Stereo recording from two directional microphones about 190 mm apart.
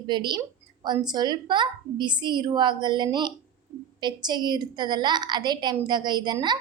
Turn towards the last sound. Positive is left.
turn(degrees=-20)  # may be behind; listen again after turning